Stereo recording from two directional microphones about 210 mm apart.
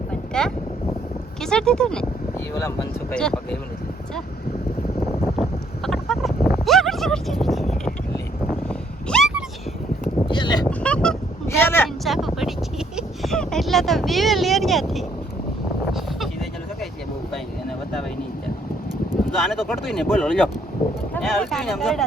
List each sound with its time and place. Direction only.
0.1 s boat: 5° left (ahead or behind)
1.4 s speech: 5° left (ahead or behind)
5.4 s a sound: centre (ahead or behind)
9.0 s cat: centre (ahead or behind)
10.2 s a sound: 20° left (ahead or behind)
10.7 s fowl: 5° left (ahead or behind)
12.0 s vehicle: centre (ahead or behind)
13.0 s speech: centre (ahead or behind)
15.9 s a sound: centre (ahead or behind)
19.4 s speech: centre (ahead or behind)